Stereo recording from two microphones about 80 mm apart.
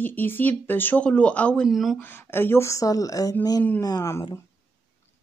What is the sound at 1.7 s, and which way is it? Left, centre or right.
Speech, centre.